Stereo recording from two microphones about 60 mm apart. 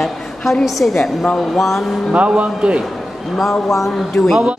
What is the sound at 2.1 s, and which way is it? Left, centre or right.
Speech, right.